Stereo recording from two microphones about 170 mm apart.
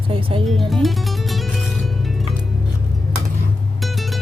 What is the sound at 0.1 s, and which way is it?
Speech, 30° right (ahead or behind).